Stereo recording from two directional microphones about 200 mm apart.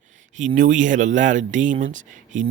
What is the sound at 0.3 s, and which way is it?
Speech, 40° right (ahead or behind).